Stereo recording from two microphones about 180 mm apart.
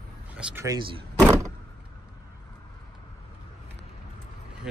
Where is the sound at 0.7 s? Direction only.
20° right (ahead or behind).